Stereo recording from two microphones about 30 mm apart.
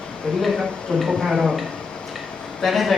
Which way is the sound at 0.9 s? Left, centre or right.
Left.